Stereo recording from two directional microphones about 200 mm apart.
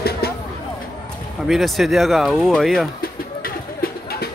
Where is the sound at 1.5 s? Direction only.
Centre (ahead or behind).